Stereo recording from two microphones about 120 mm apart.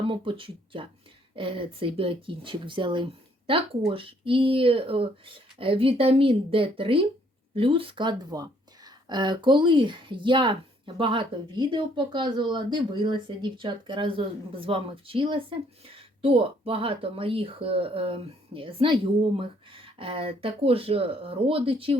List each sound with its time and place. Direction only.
0.1 s speech: 45° right (ahead or behind)